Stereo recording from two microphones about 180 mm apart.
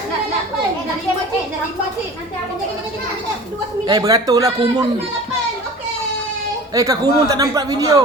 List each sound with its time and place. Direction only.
3.8 s speech: 20° right (ahead or behind)
6.7 s speech: 20° right (ahead or behind)